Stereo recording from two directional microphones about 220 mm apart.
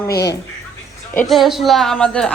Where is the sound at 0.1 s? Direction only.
50° left (ahead or behind).